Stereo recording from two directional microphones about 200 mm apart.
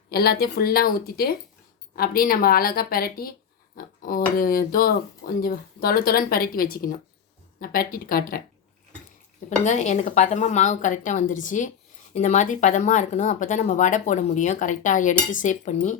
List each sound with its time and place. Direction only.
0.1 s speech: 50° left (ahead or behind)
9.6 s speech: 35° left (ahead or behind)